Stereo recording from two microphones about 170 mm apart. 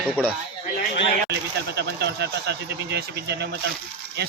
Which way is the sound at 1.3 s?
75° right (ahead or behind).